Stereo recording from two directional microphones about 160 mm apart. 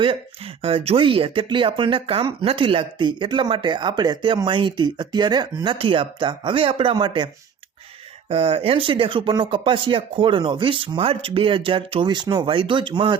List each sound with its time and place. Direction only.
0.0 s speech: 35° right (ahead or behind)
8.3 s speech: 35° right (ahead or behind)